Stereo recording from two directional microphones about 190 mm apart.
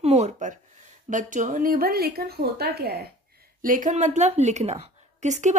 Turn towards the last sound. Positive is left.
turn(degrees=-40)  # may be behind; listen again after turning